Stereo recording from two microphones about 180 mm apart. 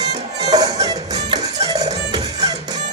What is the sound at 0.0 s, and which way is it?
Music, 20° right (ahead or behind).